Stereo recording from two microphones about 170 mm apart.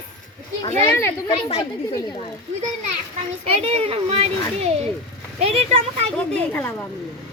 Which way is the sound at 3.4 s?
35° right (ahead or behind).